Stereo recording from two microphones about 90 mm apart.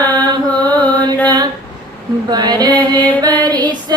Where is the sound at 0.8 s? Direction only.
15° left (ahead or behind).